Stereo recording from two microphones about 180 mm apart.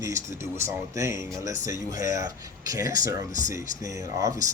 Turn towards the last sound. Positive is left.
turn(degrees=-20)  # may be behind; listen again after turning